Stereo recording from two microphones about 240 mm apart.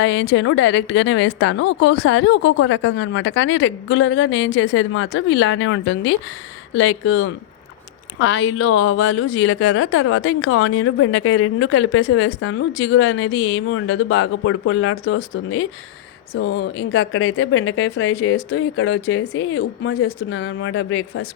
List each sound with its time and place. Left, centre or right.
0.0 s a woman's voice: left